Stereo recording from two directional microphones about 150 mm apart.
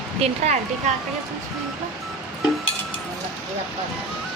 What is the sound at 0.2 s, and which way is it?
Speech, 40° right (ahead or behind).